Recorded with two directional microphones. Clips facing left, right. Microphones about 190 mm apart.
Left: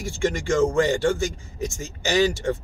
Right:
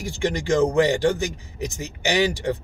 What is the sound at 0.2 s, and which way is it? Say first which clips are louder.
A man's voice: right 1 dB; 20° right (ahead or behind).